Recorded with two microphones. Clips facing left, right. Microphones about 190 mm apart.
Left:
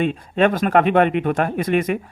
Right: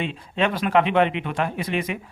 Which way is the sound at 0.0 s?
50° left (ahead or behind).